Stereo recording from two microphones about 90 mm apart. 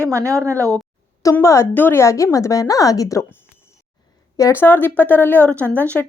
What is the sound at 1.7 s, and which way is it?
Speech, 20° left (ahead or behind).